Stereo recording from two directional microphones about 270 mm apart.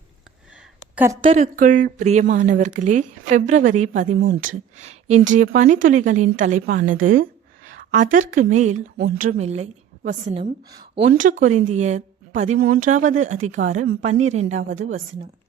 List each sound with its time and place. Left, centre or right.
0.9 s a woman's voice: centre; by 14.9 s right